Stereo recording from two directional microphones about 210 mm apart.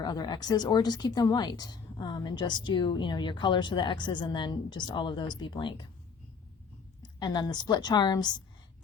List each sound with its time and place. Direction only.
0.0 s a woman's voice: 20° left (ahead or behind)
7.0 s a woman's voice: 20° left (ahead or behind)